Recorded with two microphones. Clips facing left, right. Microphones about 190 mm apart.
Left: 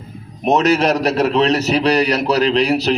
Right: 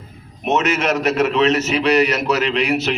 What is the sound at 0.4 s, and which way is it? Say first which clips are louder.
A man's voice: left 4 dB; 35° left (ahead or behind).